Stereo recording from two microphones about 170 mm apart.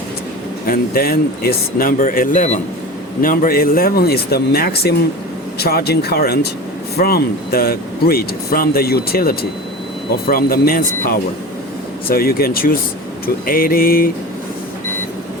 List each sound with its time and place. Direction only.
0.6 s speech: 60° left (ahead or behind)